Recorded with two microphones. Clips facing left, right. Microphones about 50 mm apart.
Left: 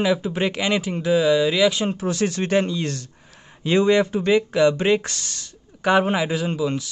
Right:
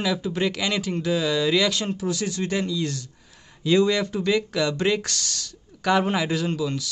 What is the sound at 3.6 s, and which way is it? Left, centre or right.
Speech, left.